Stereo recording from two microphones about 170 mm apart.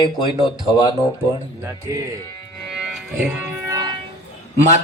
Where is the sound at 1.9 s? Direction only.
20° right (ahead or behind).